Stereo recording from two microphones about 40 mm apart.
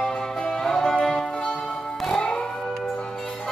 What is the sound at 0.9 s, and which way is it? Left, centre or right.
Music, left.